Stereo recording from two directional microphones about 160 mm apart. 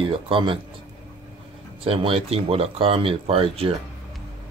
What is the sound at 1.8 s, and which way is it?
Speech, 35° right (ahead or behind).